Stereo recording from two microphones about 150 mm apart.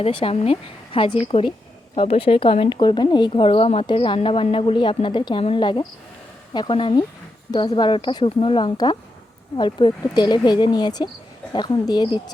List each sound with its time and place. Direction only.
0.0 s speech: 35° left (ahead or behind)